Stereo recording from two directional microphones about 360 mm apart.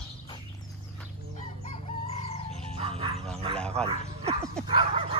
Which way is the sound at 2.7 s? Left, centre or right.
Centre.